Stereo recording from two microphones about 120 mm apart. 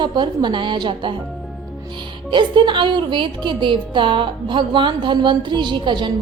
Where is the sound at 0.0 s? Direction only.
40° right (ahead or behind).